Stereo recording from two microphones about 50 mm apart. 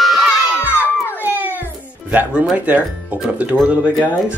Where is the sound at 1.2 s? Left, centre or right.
Right.